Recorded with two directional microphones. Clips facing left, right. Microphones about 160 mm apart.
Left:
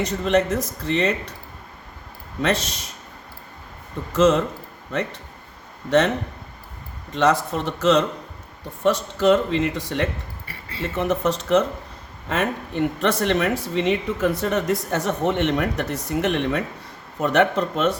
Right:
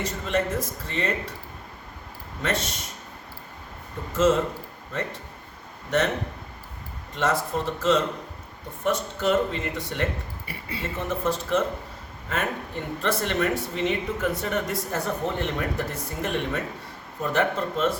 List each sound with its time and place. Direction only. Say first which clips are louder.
0.0 s speech: left 6 dB; 80° left
2.4 s speech: left 5 dB; 75° left (ahead or behind)
4.1 s speech: left 4 dB; 75° left (ahead or behind)
7.2 s speech: left 5 dB; 90° left